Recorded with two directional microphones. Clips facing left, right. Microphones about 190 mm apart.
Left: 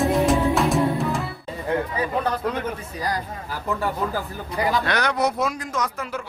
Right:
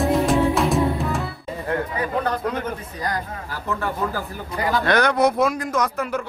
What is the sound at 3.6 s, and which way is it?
Speech, 15° left (ahead or behind).